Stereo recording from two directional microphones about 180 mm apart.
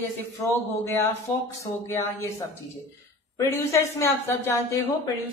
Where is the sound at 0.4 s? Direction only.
15° left (ahead or behind).